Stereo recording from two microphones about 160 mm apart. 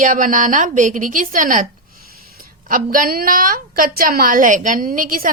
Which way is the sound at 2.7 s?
60° right (ahead or behind).